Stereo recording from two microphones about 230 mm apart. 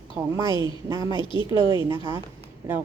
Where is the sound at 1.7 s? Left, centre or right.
Centre.